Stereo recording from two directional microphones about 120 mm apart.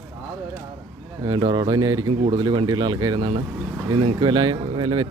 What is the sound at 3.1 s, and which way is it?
Speech, 55° right (ahead or behind).